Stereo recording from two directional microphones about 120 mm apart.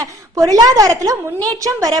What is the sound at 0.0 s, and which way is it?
A woman's voice, 30° right (ahead or behind).